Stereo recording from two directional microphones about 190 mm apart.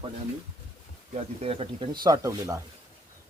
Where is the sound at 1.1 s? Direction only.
30° right (ahead or behind).